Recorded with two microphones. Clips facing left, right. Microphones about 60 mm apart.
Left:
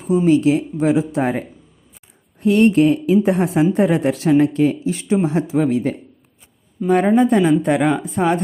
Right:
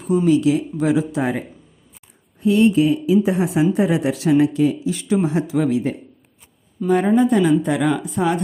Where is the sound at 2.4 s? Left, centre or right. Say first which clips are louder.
Left 2 dB; left.